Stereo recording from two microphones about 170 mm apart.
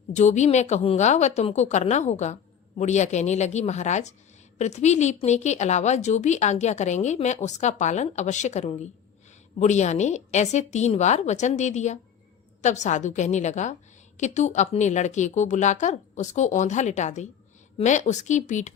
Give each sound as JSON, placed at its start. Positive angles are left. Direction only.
{"t": 0.1, "sound": "a woman's voice", "side_deg": 45}